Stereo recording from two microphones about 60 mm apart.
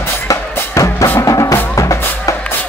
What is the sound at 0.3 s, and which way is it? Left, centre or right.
Drum, left.